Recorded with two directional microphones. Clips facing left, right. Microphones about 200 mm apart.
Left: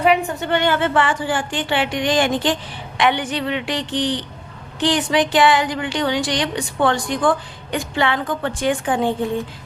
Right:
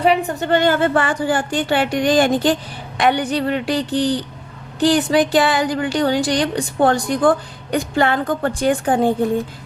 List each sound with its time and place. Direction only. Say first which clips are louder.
0.0 s a woman's voice: right 1 dB; 40° right (ahead or behind)